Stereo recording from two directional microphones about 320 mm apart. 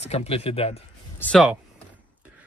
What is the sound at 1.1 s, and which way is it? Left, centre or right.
Speech, centre.